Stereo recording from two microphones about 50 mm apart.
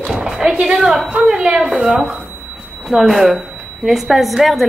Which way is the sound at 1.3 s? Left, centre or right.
Centre.